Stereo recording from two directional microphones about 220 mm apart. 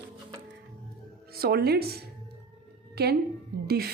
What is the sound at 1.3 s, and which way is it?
A woman's voice, 45° right (ahead or behind).